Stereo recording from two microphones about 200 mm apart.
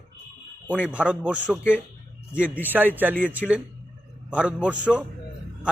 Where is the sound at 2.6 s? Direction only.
10° right (ahead or behind).